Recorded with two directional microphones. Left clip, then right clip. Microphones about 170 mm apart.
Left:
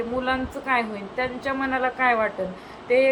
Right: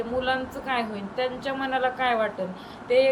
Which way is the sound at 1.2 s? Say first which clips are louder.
Left 2 dB; centre (ahead or behind).